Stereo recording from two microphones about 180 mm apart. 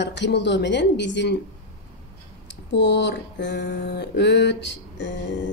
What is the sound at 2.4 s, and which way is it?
Speech, 80° left.